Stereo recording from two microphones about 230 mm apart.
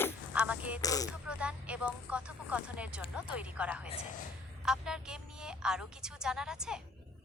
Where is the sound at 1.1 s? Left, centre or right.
Centre.